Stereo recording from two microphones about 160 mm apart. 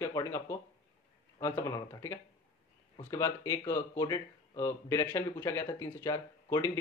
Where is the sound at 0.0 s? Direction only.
15° left (ahead or behind).